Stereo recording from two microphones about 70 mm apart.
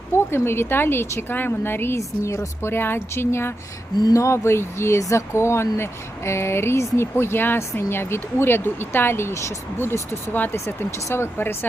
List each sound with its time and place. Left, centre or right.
0.3 s speech: left
2.0 s speech: left